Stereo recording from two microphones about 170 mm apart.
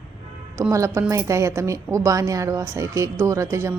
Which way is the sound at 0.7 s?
20° right (ahead or behind).